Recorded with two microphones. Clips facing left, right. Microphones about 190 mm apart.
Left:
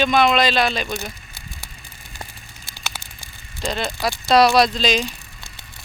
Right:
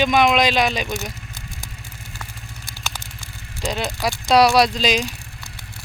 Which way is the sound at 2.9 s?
10° left (ahead or behind).